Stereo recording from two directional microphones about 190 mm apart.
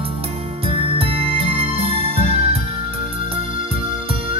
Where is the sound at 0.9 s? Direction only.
30° right (ahead or behind).